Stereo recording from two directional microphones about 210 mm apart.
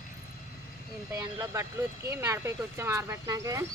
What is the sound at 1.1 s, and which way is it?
Speech, 10° right (ahead or behind).